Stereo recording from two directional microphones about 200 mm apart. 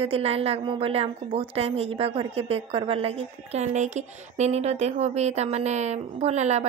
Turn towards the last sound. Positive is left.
turn(degrees=-35)  # may be behind; listen again after turning